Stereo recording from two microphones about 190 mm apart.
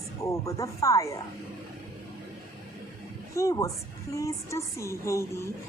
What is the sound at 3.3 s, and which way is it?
Speech, 15° left (ahead or behind).